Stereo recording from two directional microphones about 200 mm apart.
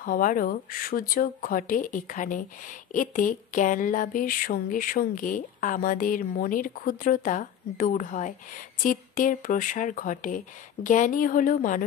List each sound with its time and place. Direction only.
0.0 s speech: 45° left (ahead or behind)